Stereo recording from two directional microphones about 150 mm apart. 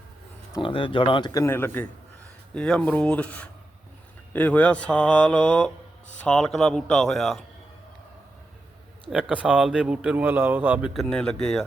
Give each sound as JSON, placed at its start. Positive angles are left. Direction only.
{"t": 0.6, "sound": "speech", "side_deg": 35}
{"t": 9.3, "sound": "speech", "side_deg": -10}